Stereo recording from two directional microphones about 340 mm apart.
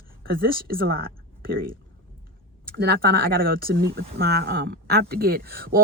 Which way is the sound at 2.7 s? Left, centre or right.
Right.